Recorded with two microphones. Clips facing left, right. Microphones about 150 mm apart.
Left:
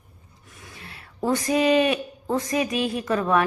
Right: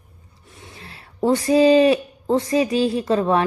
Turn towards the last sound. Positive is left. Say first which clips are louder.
# right 3 dB
turn(degrees=-30)  # may be behind; listen again after turning